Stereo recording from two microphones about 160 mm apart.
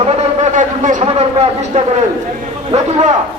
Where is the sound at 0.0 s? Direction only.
45° right (ahead or behind).